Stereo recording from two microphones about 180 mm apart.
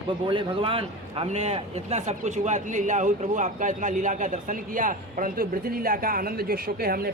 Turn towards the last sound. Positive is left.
turn(degrees=-55)  # may be behind; listen again after turning